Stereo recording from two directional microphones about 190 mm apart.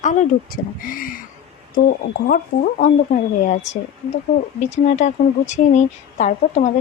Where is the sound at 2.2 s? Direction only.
45° left (ahead or behind).